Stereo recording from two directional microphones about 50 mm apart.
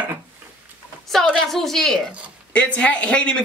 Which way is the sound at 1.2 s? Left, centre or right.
Centre.